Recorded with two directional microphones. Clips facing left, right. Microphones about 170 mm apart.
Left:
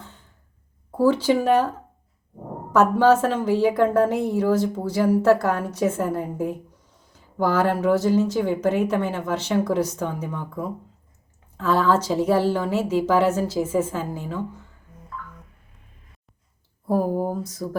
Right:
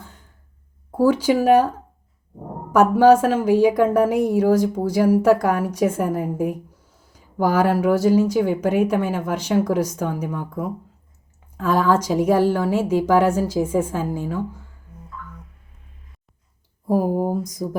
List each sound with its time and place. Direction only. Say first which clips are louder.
0.0 s a sound: right 1 dB; 10° right (ahead or behind)
0.9 s a woman's voice: right 2 dB; 10° right (ahead or behind)
2.7 s a woman's voice: right 3 dB; 10° right (ahead or behind)
16.9 s a woman's voice: right 2 dB; 10° right (ahead or behind)